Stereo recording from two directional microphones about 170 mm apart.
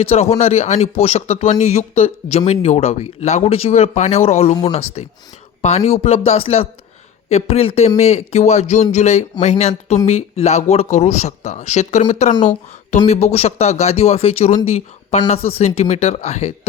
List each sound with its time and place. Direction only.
0.0 s a man's voice: 35° left (ahead or behind)